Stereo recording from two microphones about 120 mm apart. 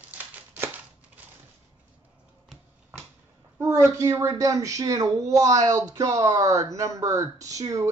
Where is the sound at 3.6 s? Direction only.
25° right (ahead or behind).